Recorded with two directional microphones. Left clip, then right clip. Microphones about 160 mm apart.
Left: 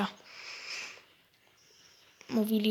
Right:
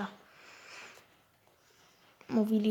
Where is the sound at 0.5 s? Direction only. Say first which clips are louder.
Left 9 dB; 20° left (ahead or behind).